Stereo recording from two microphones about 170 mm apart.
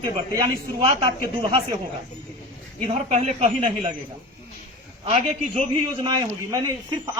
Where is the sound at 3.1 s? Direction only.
40° right (ahead or behind).